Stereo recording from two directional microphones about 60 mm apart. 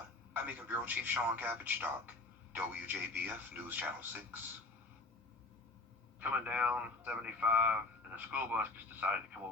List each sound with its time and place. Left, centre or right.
0.3 s a man's voice: right
6.1 s speech: right